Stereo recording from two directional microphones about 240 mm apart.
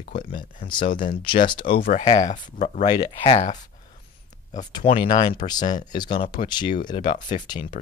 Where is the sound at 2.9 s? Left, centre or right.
Centre.